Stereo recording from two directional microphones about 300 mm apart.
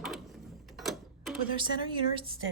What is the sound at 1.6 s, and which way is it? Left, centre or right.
Speech, centre.